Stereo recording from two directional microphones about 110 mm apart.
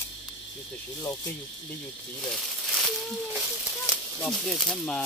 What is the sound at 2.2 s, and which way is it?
Speech, centre (ahead or behind).